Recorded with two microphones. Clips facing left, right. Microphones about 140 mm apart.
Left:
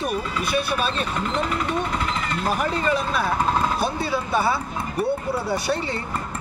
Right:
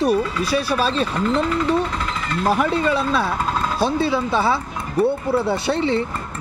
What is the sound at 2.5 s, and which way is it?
Speech, 30° right (ahead or behind).